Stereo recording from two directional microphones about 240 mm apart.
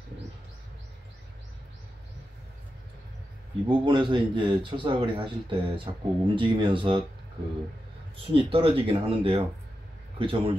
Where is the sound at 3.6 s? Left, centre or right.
Centre.